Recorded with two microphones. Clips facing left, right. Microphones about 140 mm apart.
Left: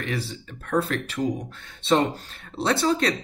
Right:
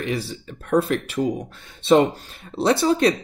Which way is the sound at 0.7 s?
20° right (ahead or behind).